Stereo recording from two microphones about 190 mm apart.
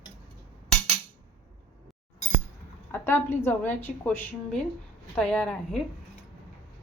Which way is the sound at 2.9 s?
10° left (ahead or behind).